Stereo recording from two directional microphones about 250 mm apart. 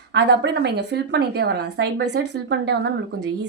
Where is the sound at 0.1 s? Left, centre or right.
Right.